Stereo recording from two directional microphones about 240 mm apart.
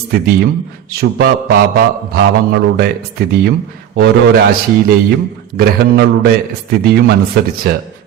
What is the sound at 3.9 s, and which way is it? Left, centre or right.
A man's voice, right.